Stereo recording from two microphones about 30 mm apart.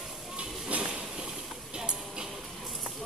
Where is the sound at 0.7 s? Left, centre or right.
Right.